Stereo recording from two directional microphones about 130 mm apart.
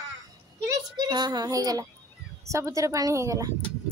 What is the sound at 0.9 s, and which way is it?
A child's voice, 35° right (ahead or behind).